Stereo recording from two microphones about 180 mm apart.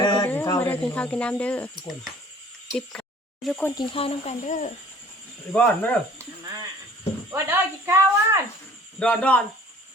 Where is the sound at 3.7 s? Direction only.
25° left (ahead or behind); by 4.7 s 45° left (ahead or behind).